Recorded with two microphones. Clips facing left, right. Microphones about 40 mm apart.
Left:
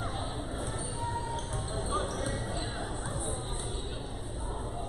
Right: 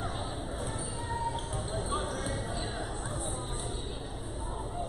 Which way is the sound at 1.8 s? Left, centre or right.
Centre.